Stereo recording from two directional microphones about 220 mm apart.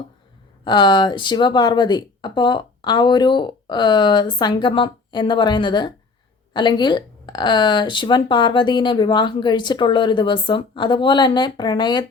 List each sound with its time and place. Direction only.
0.6 s speech: 20° left (ahead or behind)